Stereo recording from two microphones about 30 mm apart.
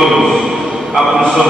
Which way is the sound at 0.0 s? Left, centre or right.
Centre.